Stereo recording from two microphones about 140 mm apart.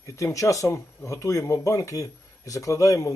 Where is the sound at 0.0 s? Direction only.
20° left (ahead or behind).